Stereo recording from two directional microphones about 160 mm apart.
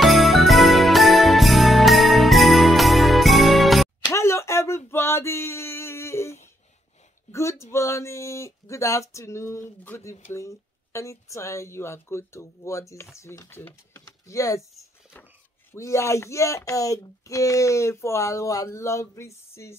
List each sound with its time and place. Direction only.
0.0 s jingle bell: centre (ahead or behind)
4.0 s a sound: 20° left (ahead or behind)
10.3 s speech: 20° left (ahead or behind)
15.7 s speech: 20° left (ahead or behind)